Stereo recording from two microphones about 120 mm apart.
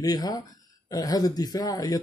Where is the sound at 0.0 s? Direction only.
35° left (ahead or behind).